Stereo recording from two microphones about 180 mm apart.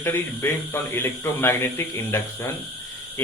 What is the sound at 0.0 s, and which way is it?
Speech, 15° left (ahead or behind).